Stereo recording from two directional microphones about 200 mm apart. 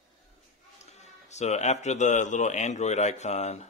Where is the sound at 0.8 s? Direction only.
35° left (ahead or behind).